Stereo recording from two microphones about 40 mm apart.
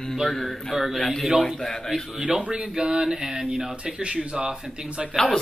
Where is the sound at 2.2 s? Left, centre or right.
Centre.